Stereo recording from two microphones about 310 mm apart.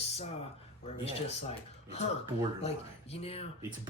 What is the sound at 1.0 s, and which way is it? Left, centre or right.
Speech, centre.